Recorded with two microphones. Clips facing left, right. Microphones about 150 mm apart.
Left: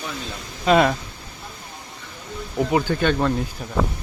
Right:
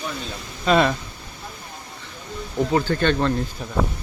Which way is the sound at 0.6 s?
10° left (ahead or behind).